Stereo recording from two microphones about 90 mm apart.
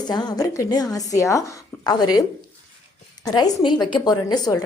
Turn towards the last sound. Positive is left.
turn(degrees=45)  # may be behind; listen again after turning